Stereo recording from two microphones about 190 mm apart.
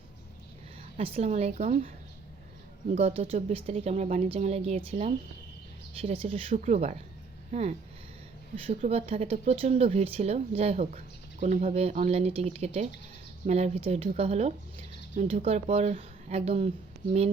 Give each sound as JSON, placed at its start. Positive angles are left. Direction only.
{"t": 0.9, "sound": "speech", "side_deg": -30}
{"t": 2.9, "sound": "speech", "side_deg": -35}